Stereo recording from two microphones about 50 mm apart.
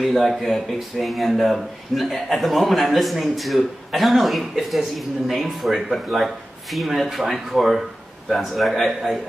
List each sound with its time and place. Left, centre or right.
0.0 s speech: centre